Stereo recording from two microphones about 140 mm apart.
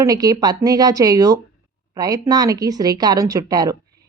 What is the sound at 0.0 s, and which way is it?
A woman's voice, 25° right (ahead or behind).